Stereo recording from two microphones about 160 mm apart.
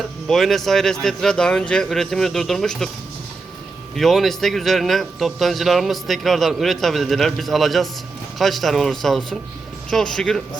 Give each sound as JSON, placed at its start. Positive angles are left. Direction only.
{"t": 0.3, "sound": "a man's voice", "side_deg": 0}
{"t": 3.9, "sound": "a man's voice", "side_deg": 0}